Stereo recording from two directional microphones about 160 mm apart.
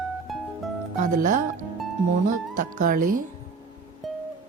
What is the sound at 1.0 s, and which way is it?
A woman's voice, 55° right (ahead or behind).